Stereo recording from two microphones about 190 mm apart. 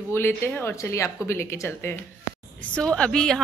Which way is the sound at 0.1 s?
15° left (ahead or behind).